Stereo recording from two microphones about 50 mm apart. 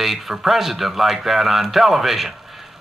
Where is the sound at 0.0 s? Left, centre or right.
Centre.